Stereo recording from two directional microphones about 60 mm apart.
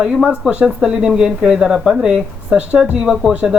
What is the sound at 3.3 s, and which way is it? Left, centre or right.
Speech, right.